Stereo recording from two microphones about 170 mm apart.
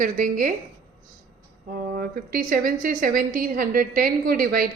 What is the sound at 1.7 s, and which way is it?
A woman's voice, 55° right (ahead or behind).